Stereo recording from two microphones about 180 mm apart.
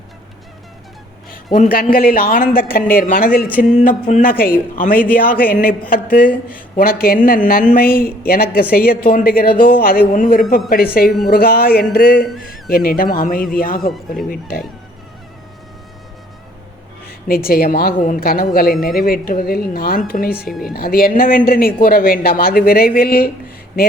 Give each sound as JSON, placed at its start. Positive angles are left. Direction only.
{"t": 1.5, "sound": "speech", "side_deg": 50}
{"t": 17.1, "sound": "speech", "side_deg": 55}
{"t": 20.3, "sound": "speech", "side_deg": -5}
{"t": 20.7, "sound": "speech", "side_deg": 55}